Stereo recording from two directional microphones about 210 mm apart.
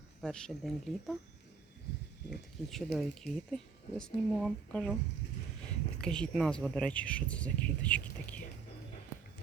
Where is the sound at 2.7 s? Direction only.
Centre (ahead or behind).